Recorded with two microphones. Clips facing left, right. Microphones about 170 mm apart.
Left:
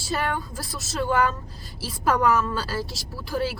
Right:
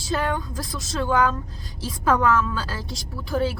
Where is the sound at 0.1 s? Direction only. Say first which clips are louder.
Right 2 dB; 10° left (ahead or behind).